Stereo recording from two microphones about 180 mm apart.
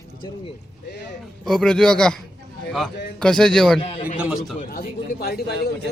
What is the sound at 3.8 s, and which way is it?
Speech, 35° left (ahead or behind).